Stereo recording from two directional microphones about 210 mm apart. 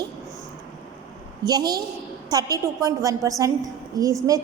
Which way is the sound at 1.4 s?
20° right (ahead or behind).